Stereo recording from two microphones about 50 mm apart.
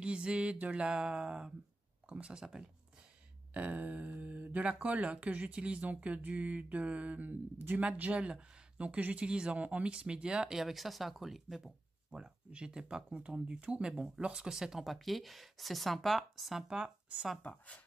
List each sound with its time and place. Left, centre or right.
0.0 s speech: right
3.5 s a sound: right
4.2 s speech: right
7.8 s speech: right
10.6 s speech: centre
15.0 s speech: centre
16.6 s speech: centre
17.4 s speech: left